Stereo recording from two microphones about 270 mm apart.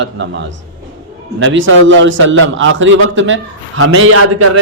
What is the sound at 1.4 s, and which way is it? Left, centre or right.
Speech, right.